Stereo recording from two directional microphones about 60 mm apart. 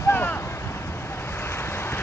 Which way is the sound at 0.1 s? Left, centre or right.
Left.